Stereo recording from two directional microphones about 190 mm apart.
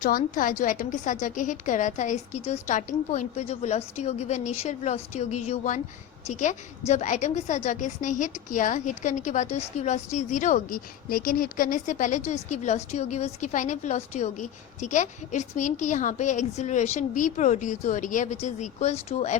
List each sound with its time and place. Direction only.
0.0 s a woman's voice: 45° left (ahead or behind)